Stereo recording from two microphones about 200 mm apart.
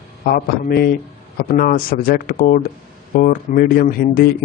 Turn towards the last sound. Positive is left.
turn(degrees=50)  # may be behind; listen again after turning